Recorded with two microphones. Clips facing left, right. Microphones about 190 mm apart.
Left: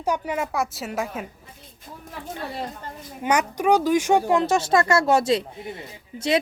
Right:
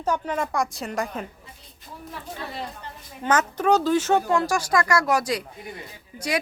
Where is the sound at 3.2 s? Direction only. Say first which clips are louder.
Left 1 dB; 10° left (ahead or behind).